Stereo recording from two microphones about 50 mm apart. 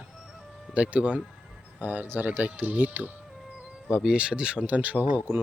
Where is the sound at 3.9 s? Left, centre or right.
Centre; by 5.2 s right.